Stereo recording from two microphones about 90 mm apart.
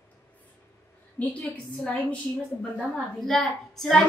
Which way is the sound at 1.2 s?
15° left (ahead or behind).